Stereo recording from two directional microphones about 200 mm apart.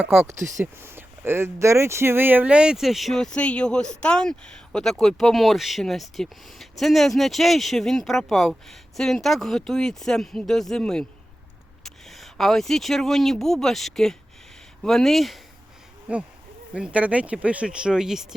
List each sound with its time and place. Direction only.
0.0 s speech: 5° right (ahead or behind)
0.3 s speech: 40° right (ahead or behind)
0.6 s speech: 10° right (ahead or behind)